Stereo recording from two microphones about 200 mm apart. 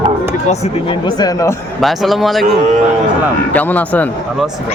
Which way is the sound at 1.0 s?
20° left (ahead or behind).